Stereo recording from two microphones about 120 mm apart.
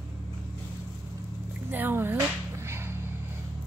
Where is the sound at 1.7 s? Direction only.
15° right (ahead or behind).